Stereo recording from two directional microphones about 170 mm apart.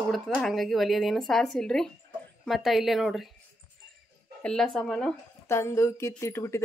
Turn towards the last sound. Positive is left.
turn(degrees=15)  # may be behind; listen again after turning